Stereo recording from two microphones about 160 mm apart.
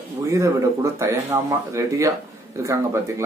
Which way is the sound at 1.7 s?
20° right (ahead or behind).